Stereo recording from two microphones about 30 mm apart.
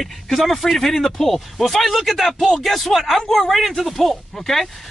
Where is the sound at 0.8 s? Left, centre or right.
Centre.